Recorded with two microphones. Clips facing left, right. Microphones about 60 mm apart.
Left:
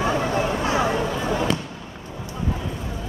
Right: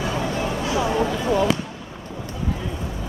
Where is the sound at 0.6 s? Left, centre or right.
Left.